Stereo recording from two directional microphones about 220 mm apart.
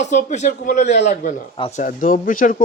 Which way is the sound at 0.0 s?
35° left (ahead or behind).